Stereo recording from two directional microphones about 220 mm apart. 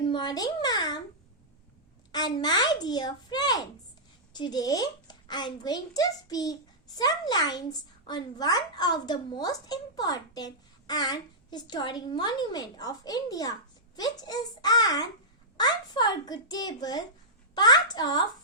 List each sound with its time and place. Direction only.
0.0 s a child's voice: 20° left (ahead or behind)
2.1 s a child's voice: 20° left (ahead or behind)